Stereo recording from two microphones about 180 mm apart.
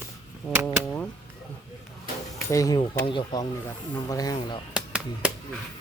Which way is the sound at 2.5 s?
20° left (ahead or behind).